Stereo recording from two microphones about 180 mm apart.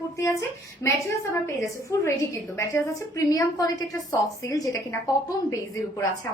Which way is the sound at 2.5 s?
15° left (ahead or behind).